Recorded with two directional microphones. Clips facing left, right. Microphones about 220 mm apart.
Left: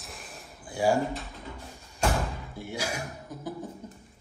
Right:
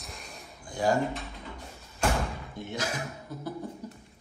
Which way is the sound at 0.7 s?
10° left (ahead or behind).